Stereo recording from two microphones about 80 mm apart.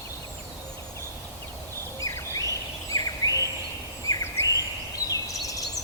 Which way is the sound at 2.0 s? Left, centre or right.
Left.